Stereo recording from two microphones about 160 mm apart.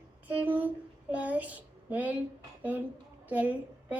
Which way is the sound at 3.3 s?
10° right (ahead or behind).